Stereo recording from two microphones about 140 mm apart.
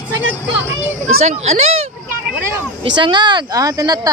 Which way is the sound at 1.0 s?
55° right (ahead or behind).